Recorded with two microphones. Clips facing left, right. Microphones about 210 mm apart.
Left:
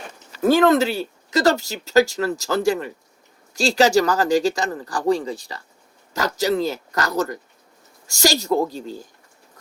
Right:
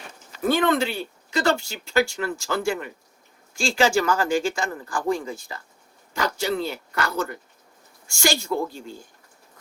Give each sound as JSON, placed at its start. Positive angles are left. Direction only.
{"t": 0.3, "sound": "speech", "side_deg": 40}